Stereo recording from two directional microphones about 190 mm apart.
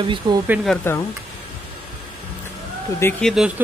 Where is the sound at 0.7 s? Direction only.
5° left (ahead or behind).